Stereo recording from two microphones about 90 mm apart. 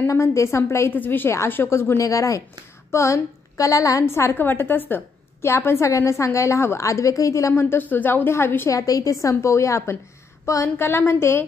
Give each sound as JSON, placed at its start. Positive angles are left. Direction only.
{"t": 0.0, "sound": "a woman's voice", "side_deg": 35}
{"t": 4.0, "sound": "a woman's voice", "side_deg": 30}
{"t": 7.7, "sound": "a woman's voice", "side_deg": 20}
{"t": 8.7, "sound": "a woman's voice", "side_deg": 40}